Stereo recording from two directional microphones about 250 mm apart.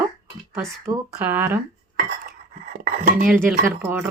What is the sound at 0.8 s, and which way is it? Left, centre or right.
Speech, centre.